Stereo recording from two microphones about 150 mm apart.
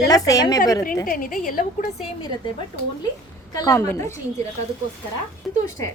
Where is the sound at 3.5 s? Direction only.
25° left (ahead or behind).